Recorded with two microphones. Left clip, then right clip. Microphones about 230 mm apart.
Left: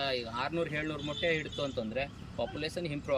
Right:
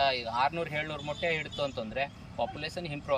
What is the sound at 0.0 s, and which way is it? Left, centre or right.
Speech, centre.